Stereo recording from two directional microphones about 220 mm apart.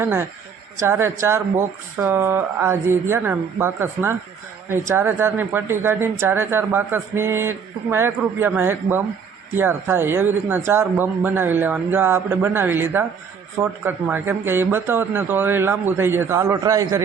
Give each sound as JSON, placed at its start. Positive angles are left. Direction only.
{"t": 0.0, "sound": "speech", "side_deg": -10}